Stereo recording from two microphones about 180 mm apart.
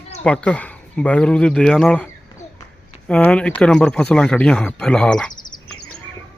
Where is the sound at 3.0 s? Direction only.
5° left (ahead or behind).